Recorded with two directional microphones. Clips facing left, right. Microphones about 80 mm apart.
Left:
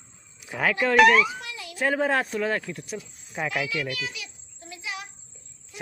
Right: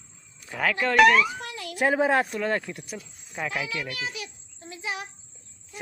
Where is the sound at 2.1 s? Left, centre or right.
Centre.